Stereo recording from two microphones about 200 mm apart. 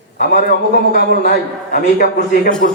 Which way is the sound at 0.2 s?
50° left (ahead or behind).